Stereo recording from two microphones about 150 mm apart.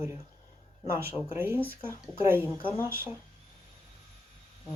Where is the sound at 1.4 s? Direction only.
15° right (ahead or behind).